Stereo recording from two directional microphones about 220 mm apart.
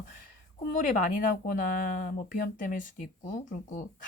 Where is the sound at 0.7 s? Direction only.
40° left (ahead or behind).